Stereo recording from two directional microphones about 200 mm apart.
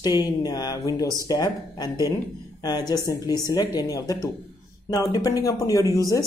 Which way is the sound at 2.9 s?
20° left (ahead or behind).